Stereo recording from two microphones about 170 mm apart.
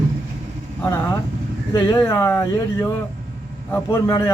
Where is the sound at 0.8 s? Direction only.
15° left (ahead or behind).